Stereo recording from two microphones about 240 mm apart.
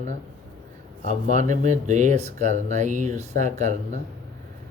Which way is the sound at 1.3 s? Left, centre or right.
Right.